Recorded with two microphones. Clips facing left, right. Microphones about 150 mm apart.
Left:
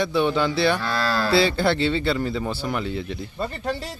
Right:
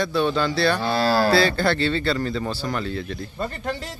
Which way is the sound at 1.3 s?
20° left (ahead or behind).